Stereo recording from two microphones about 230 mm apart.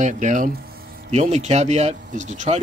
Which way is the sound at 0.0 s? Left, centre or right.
Right.